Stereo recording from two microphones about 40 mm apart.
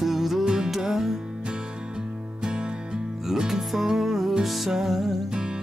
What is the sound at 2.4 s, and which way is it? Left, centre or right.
Music, right.